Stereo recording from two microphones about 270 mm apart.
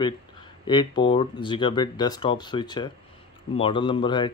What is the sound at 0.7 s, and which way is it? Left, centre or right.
Speech, centre.